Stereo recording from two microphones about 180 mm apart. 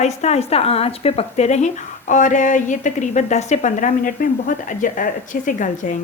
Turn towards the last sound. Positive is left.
turn(degrees=45)  # may be behind; listen again after turning